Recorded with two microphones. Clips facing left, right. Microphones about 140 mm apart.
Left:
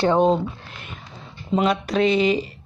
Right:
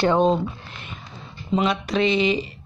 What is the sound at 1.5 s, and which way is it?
Speech, 45° left (ahead or behind).